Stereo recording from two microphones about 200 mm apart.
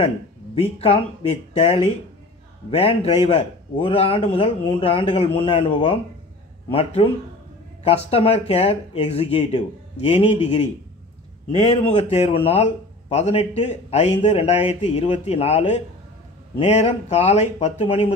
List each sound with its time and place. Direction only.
0.6 s speech: 25° left (ahead or behind)
11.6 s speech: 30° left (ahead or behind)